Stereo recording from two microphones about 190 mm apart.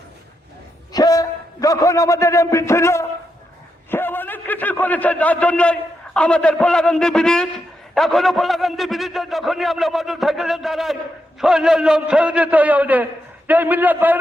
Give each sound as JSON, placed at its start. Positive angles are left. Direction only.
{"t": 0.9, "sound": "a man's voice", "side_deg": 20}
{"t": 3.9, "sound": "a sound", "side_deg": 10}
{"t": 6.1, "sound": "a man's voice", "side_deg": 5}